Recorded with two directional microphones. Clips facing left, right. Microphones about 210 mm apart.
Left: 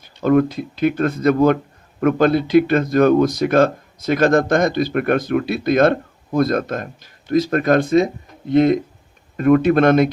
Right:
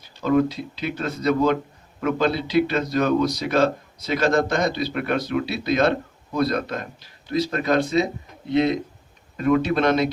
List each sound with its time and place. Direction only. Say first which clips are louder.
0.0 s speech: left 4 dB; 50° left (ahead or behind)